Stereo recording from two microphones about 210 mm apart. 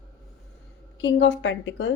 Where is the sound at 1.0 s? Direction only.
60° left (ahead or behind).